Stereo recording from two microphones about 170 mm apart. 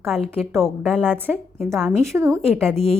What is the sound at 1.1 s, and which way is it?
Speech, 10° right (ahead or behind).